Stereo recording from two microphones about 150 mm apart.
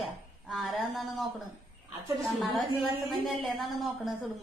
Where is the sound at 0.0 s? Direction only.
Centre (ahead or behind).